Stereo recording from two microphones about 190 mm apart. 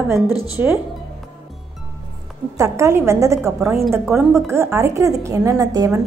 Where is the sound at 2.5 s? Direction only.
15° right (ahead or behind).